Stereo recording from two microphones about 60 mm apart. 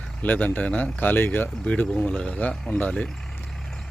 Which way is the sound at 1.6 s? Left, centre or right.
Centre.